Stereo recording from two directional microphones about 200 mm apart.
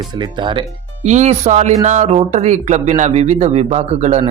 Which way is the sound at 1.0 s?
35° right (ahead or behind).